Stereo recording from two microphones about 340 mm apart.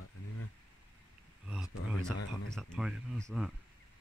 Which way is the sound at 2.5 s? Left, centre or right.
Centre.